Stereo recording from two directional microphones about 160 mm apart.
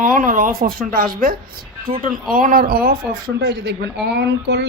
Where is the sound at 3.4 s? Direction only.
90° right.